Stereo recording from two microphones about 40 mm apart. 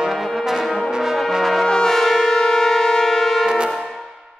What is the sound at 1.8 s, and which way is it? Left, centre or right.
Wind instrument, centre.